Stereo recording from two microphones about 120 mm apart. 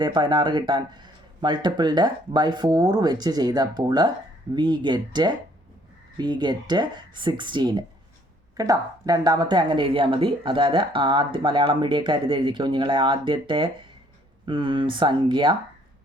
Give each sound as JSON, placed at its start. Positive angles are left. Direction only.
{"t": 0.0, "sound": "speech", "side_deg": -40}
{"t": 8.5, "sound": "speech", "side_deg": -30}